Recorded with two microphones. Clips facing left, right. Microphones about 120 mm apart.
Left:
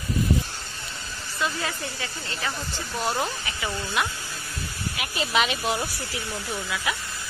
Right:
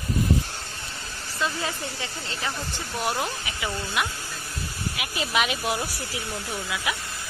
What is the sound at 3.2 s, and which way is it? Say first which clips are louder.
Speech: even; 10° right (ahead or behind).